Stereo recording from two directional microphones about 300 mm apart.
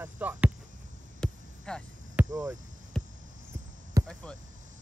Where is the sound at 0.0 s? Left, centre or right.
Centre.